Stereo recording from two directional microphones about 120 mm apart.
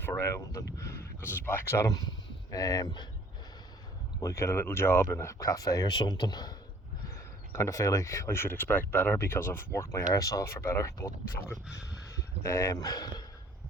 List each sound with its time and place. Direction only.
0.0 s speech: 20° left (ahead or behind); by 3.1 s 35° left (ahead or behind)
4.2 s speech: 25° left (ahead or behind)
7.5 s speech: 25° left (ahead or behind)
11.4 s speech: 5° right (ahead or behind)
12.1 s speech: 25° left (ahead or behind)